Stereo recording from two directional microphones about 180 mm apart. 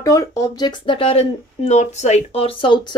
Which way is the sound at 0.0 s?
20° left (ahead or behind).